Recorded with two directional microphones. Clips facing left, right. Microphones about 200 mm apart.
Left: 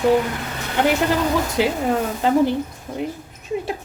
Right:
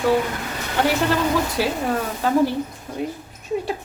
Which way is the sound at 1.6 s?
20° left (ahead or behind).